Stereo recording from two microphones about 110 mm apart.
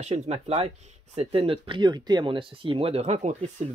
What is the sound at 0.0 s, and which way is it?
Speech, 75° right (ahead or behind).